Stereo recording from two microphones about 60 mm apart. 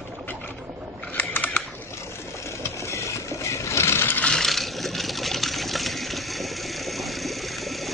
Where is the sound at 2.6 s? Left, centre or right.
Left.